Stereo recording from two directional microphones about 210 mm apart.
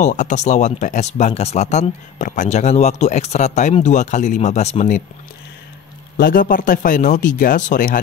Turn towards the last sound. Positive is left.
turn(degrees=40)  # may be behind; listen again after turning